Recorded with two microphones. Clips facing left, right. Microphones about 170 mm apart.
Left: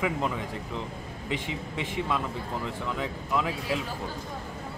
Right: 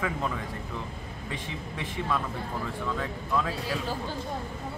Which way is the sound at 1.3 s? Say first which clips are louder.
Left 5 dB; 20° left (ahead or behind).